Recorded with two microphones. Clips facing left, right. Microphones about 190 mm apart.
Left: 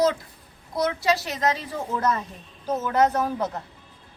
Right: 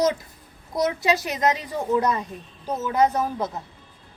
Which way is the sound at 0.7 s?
20° right (ahead or behind).